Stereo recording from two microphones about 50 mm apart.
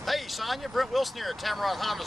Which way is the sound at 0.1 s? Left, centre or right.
Centre.